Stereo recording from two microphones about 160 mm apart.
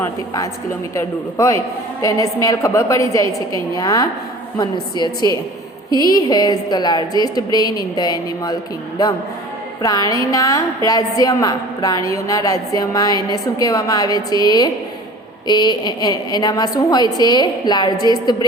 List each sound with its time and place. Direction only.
0.0 s a woman's voice: 20° left (ahead or behind)
9.8 s a woman's voice: 20° left (ahead or behind)